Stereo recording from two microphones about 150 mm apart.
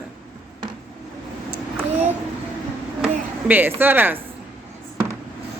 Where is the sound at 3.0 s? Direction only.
10° right (ahead or behind).